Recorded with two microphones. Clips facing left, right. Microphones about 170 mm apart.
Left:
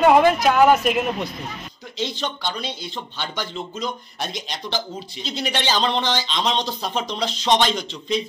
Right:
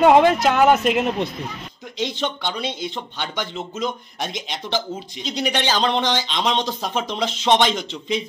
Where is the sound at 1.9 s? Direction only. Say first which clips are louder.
Right 2 dB; 15° right (ahead or behind).